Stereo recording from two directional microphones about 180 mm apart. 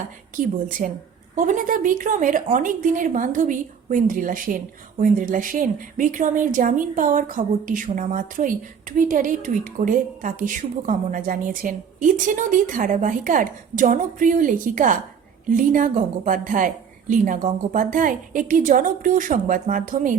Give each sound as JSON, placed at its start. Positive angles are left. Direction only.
{"t": 0.3, "sound": "a woman's voice", "side_deg": -50}